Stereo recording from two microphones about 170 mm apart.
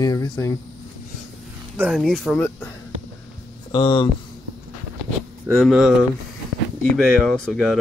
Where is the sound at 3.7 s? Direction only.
30° left (ahead or behind).